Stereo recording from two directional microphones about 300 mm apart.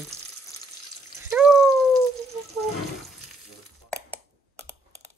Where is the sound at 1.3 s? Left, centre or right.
Centre.